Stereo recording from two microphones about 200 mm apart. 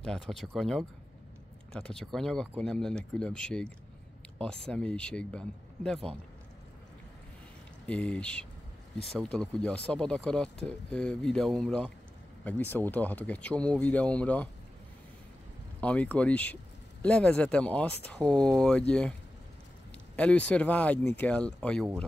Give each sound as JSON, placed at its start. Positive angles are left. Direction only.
{"t": 0.0, "sound": "speech", "side_deg": 0}
{"t": 7.8, "sound": "speech", "side_deg": 5}
{"t": 15.8, "sound": "speech", "side_deg": 5}
{"t": 20.2, "sound": "speech", "side_deg": 5}